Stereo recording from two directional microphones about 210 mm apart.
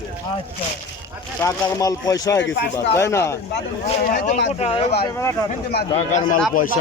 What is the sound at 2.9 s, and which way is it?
Speech, 15° left (ahead or behind).